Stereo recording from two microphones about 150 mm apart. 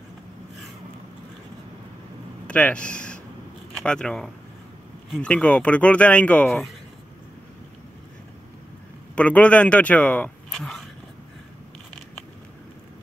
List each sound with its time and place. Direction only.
2.4 s speech: 10° left (ahead or behind)
9.1 s speech: 10° left (ahead or behind)